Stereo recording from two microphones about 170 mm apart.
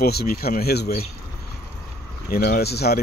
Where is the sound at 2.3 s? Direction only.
70° left (ahead or behind).